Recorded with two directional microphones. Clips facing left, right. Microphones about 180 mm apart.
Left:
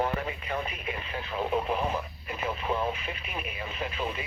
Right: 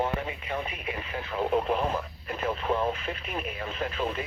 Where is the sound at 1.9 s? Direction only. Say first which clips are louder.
Right 1 dB; 10° left (ahead or behind).